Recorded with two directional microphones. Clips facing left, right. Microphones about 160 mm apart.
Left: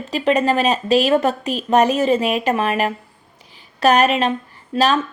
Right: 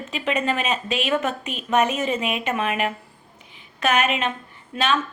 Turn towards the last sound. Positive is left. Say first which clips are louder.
# left 6 dB
turn(degrees=35)  # may be behind; listen again after turning